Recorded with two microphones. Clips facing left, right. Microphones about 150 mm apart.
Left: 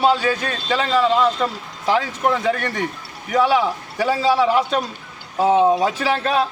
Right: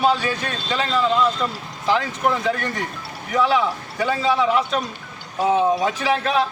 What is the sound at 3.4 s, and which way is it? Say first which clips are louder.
A man's voice: left 1 dB; 30° left (ahead or behind).